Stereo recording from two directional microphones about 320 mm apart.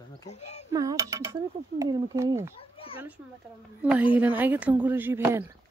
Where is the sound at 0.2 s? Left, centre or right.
Centre.